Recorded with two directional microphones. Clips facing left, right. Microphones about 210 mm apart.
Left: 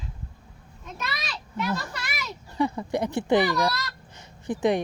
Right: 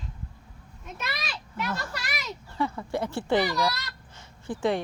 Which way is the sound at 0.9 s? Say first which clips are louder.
Left 1 dB; centre (ahead or behind).